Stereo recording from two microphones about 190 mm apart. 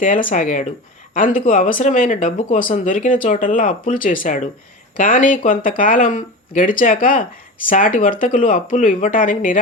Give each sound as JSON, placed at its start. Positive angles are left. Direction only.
{"t": 0.0, "sound": "speech", "side_deg": 45}